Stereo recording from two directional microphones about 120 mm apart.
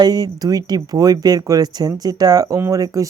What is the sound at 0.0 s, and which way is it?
Speech, 35° right (ahead or behind).